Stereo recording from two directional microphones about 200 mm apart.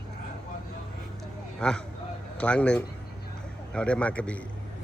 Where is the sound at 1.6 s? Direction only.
5° left (ahead or behind).